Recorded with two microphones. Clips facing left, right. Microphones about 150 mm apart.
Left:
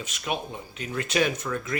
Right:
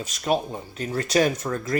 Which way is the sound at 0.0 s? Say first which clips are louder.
Right 7 dB; 40° right (ahead or behind).